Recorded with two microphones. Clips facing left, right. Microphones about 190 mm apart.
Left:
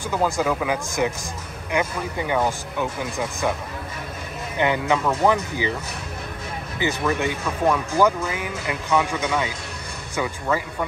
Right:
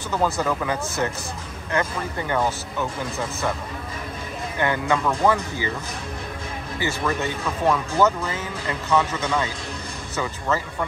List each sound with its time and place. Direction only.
0.1 s speech: 10° left (ahead or behind)
4.6 s speech: 15° left (ahead or behind)
6.8 s speech: 15° left (ahead or behind)